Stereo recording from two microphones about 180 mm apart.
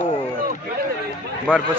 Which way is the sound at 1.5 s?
5° left (ahead or behind).